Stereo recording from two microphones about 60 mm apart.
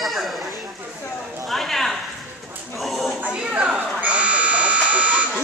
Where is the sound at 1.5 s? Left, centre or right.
Centre.